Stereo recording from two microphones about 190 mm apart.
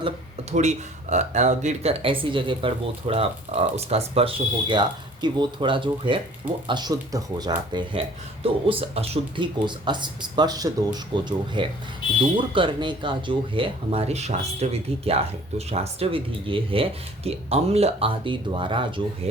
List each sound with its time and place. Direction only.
0.5 s speech: 40° right (ahead or behind)